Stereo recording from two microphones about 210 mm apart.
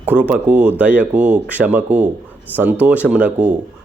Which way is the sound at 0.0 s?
5° right (ahead or behind).